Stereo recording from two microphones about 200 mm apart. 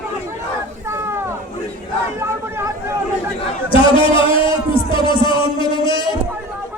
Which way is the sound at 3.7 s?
25° left (ahead or behind).